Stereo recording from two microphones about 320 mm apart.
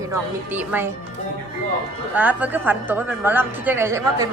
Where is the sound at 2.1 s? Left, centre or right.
Centre.